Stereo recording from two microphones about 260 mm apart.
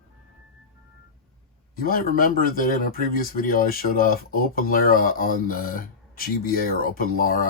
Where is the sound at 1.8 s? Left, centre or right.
Left.